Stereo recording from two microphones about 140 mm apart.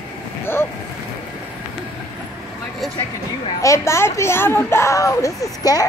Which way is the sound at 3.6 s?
20° left (ahead or behind).